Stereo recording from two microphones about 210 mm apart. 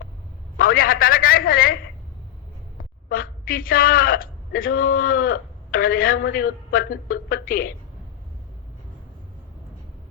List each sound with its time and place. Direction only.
0.5 s a man's voice: 45° left (ahead or behind)
3.1 s a woman's voice: 45° left (ahead or behind)